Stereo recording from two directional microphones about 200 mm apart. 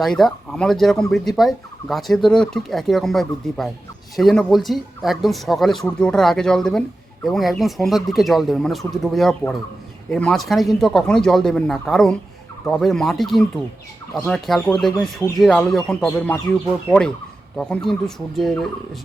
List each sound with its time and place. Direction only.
0.0 s speech: centre (ahead or behind)
17.6 s speech: centre (ahead or behind)